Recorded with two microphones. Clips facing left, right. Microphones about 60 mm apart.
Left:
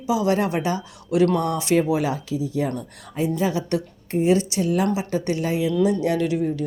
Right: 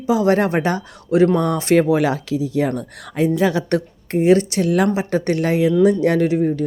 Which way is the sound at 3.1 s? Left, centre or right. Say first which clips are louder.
Right 5 dB; right.